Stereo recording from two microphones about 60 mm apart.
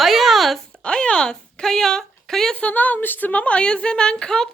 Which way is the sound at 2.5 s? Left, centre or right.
Left.